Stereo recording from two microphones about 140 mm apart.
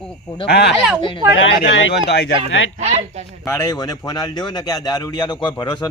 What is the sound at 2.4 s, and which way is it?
Speech, 50° right (ahead or behind).